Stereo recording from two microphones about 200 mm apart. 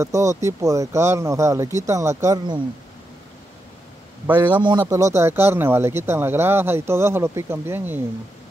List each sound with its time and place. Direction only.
0.0 s speech: 15° right (ahead or behind)
4.3 s speech: 10° right (ahead or behind)
4.6 s speech: 25° right (ahead or behind)